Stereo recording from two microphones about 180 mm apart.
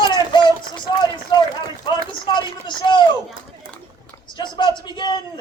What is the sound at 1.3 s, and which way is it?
Run, 25° left (ahead or behind).